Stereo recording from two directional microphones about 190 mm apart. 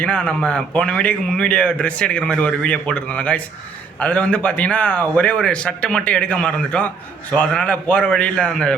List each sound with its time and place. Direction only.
0.0 s a man's voice: 5° left (ahead or behind)